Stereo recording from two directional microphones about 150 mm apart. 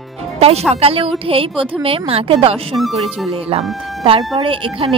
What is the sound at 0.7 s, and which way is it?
Speech, 40° right (ahead or behind).